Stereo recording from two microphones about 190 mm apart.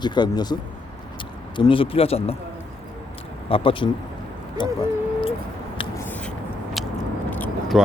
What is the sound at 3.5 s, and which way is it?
Speech, 30° left (ahead or behind).